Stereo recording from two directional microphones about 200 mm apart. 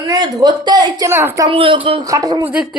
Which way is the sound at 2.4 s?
5° right (ahead or behind).